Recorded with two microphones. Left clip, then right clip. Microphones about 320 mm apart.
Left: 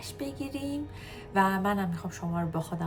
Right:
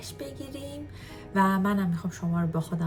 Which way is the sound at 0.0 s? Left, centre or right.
Centre.